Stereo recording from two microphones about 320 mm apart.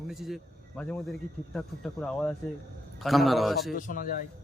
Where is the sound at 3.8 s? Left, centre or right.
Left.